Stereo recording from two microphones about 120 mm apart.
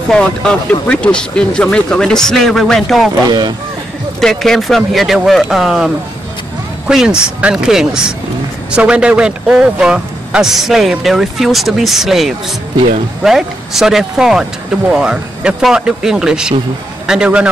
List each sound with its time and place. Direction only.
0.1 s speech: 5° left (ahead or behind)
3.3 s speech: 35° right (ahead or behind)
4.2 s speech: 5° left (ahead or behind)
6.9 s a man's voice: 5° right (ahead or behind)